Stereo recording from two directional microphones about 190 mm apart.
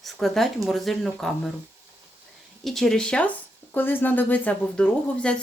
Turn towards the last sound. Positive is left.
turn(degrees=5)  # may be behind; listen again after turning